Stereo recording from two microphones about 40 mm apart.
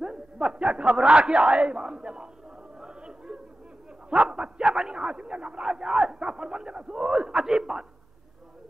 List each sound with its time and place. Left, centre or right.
0.0 s a sound: centre
0.6 s speech: right
2.8 s chatter: right
4.1 s a man's voice: right
5.7 s a man's voice: centre